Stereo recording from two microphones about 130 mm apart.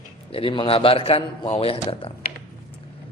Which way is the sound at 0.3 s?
45° left (ahead or behind).